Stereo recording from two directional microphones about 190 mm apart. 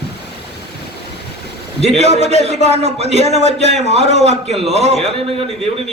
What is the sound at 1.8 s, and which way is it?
Speech, 35° right (ahead or behind).